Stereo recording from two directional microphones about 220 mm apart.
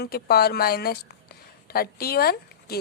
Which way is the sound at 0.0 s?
45° left (ahead or behind).